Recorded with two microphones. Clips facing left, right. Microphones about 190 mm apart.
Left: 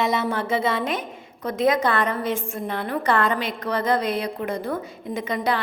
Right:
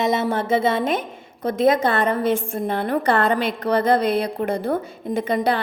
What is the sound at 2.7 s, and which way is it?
Speech, 50° right (ahead or behind).